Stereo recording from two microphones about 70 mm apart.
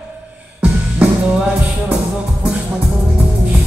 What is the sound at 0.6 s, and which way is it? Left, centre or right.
Music, centre.